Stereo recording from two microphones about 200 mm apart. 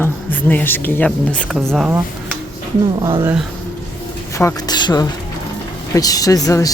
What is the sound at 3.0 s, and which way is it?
Speech, 15° right (ahead or behind).